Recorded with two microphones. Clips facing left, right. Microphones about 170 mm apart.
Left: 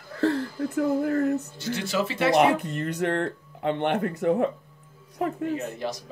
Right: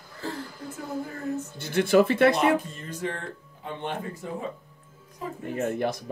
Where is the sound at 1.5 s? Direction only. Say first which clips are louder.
Right 7 dB; 55° right (ahead or behind).